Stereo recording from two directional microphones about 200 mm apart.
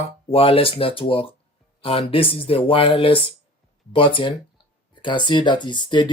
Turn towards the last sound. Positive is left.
turn(degrees=25)  # may be behind; listen again after turning